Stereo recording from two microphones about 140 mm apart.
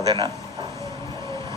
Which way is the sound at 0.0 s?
30° right (ahead or behind).